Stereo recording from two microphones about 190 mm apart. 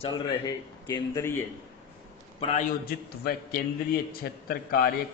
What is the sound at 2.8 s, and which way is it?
A man's voice, 55° left (ahead or behind).